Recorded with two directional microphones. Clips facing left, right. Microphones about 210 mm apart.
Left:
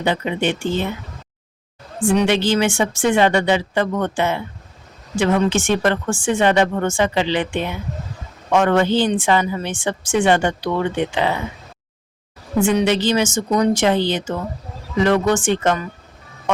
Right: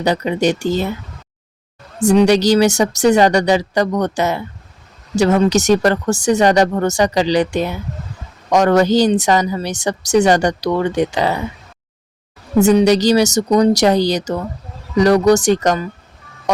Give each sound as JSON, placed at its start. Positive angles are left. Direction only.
{"t": 0.0, "sound": "a woman's voice", "side_deg": -40}
{"t": 2.0, "sound": "a woman's voice", "side_deg": -40}
{"t": 12.5, "sound": "a woman's voice", "side_deg": -40}